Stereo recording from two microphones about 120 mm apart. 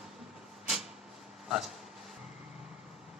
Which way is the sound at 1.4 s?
Centre (ahead or behind).